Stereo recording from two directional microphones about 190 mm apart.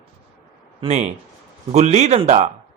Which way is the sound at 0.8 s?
35° right (ahead or behind).